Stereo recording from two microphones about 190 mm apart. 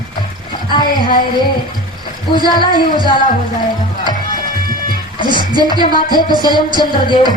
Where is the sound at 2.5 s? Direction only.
25° left (ahead or behind).